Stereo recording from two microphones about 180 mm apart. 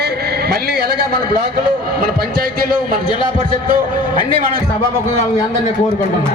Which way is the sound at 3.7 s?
50° right (ahead or behind).